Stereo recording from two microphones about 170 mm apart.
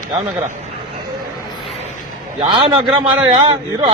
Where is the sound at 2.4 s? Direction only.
30° right (ahead or behind).